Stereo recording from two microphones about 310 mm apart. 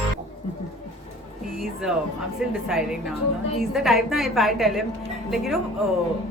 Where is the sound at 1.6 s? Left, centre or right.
Centre.